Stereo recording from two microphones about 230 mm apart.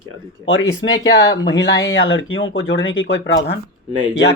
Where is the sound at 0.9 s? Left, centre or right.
Centre.